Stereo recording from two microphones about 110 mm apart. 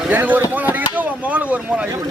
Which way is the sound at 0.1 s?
15° right (ahead or behind).